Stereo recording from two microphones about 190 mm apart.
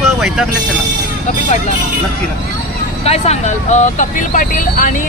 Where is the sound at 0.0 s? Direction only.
Centre (ahead or behind).